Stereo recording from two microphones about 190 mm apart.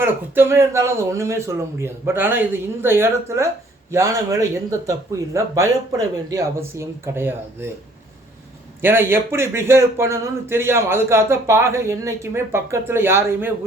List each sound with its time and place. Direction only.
0.0 s speech: 10° right (ahead or behind)
8.8 s speech: 10° right (ahead or behind)